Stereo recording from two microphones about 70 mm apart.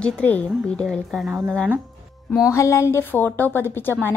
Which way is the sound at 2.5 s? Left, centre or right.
Left.